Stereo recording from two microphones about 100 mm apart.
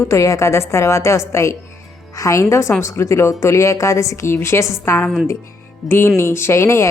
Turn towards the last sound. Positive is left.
turn(degrees=25)  # may be behind; listen again after turning